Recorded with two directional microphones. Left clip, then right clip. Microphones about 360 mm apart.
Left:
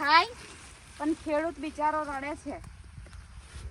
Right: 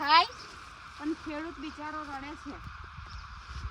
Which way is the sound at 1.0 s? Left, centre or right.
Centre.